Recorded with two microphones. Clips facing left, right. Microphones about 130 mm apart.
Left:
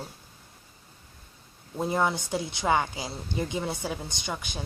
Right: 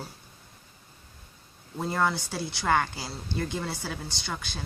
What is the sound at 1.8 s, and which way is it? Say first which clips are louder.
Speech: left 1 dB; 20° left (ahead or behind).